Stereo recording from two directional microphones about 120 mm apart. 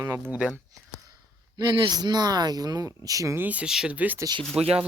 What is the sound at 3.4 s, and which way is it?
Speech, 10° right (ahead or behind).